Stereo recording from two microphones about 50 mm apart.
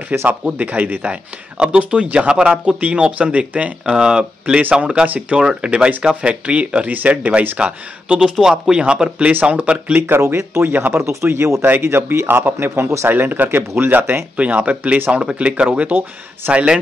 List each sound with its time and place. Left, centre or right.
0.1 s a man's voice: right
0.6 s speech: right
1.1 s speech: right
3.9 s speech: centre
9.3 s speech: right
9.9 s a man's voice: right
10.2 s speech: right
10.6 s a man's voice: right
11.2 s speech: right
11.6 s a man's voice: right
13.1 s a man's voice: right
14.3 s speech: right